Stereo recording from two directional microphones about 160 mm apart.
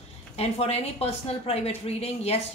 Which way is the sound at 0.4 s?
40° left (ahead or behind).